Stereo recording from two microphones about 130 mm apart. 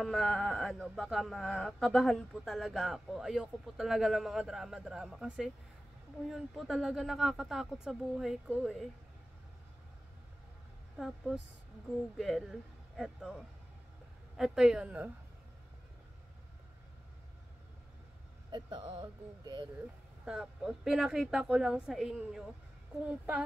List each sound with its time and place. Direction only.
0.0 s speech: centre (ahead or behind)
11.0 s speech: centre (ahead or behind)
18.5 s speech: 35° right (ahead or behind)
20.2 s speech: 5° right (ahead or behind)